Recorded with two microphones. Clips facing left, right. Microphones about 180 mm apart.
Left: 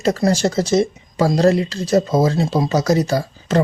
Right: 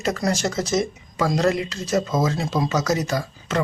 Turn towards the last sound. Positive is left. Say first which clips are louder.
# left 6 dB
turn(degrees=35)  # may be behind; listen again after turning